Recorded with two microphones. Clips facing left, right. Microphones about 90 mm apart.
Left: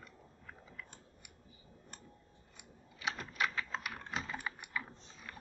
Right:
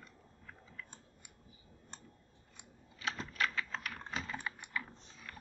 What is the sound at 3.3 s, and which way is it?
Typing, 15° left (ahead or behind).